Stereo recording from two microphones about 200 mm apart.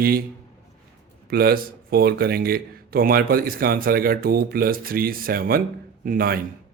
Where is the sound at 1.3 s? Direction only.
50° right (ahead or behind).